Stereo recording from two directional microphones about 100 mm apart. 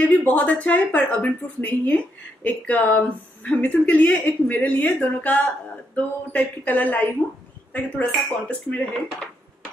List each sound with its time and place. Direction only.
0.0 s a woman's voice: 15° left (ahead or behind)